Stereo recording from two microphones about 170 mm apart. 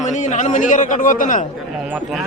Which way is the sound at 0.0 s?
45° left (ahead or behind).